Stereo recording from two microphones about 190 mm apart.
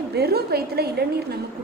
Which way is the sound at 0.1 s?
55° right (ahead or behind).